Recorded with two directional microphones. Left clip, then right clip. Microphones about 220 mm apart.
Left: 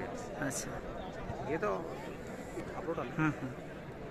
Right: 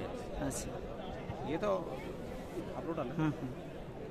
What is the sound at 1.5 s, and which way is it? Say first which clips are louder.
Speech: right 1 dB; 45° right (ahead or behind).